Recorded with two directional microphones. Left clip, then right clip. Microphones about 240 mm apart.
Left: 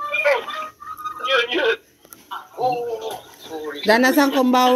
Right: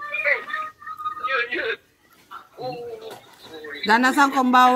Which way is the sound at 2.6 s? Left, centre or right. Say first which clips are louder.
Left 10 dB; centre.